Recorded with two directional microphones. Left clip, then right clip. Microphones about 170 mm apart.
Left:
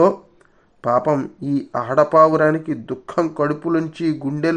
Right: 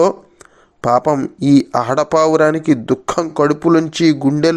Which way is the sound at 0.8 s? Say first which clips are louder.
Right 4 dB; 30° right (ahead or behind).